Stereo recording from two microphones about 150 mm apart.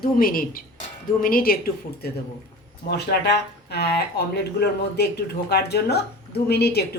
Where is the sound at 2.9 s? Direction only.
90° left.